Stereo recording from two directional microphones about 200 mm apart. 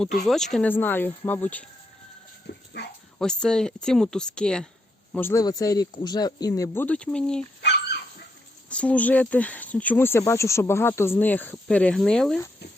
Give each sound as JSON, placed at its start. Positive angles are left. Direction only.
{"t": 0.3, "sound": "speech", "side_deg": 0}
{"t": 2.5, "sound": "dog", "side_deg": 55}
{"t": 3.2, "sound": "speech", "side_deg": 5}
{"t": 7.6, "sound": "dog", "side_deg": 55}
{"t": 8.7, "sound": "speech", "side_deg": 5}